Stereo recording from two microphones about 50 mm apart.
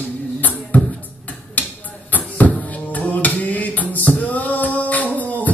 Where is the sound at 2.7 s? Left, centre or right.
Left.